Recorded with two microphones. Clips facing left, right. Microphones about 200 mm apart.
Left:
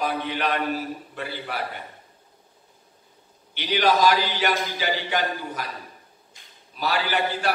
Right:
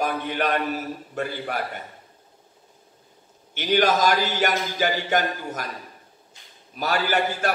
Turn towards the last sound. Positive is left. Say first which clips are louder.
# right 1 dB
turn(degrees=-45)  # may be behind; listen again after turning